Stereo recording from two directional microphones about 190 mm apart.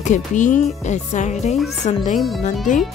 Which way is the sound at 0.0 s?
40° left (ahead or behind).